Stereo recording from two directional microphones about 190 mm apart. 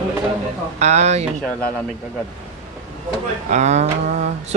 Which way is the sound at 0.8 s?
35° right (ahead or behind).